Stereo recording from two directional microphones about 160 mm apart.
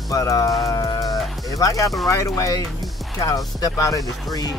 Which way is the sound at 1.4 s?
20° left (ahead or behind).